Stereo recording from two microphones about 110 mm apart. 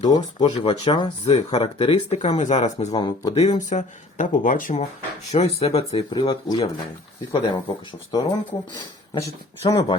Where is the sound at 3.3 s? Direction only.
90° left.